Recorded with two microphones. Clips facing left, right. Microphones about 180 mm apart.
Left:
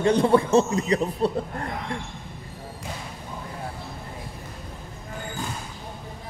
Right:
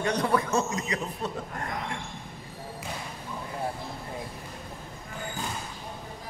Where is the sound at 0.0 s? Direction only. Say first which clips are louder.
Left 7 dB; 25° left (ahead or behind).